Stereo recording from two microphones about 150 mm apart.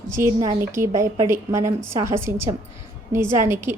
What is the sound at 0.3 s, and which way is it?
A woman's voice, 20° right (ahead or behind).